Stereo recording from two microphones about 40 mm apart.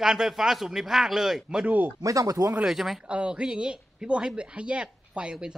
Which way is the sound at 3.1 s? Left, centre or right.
Right.